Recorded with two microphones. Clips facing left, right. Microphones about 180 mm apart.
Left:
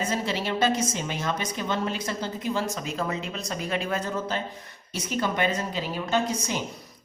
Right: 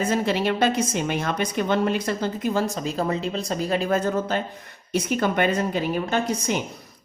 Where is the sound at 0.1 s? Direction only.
55° right (ahead or behind).